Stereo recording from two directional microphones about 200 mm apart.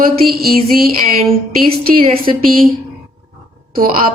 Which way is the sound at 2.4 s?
45° right (ahead or behind).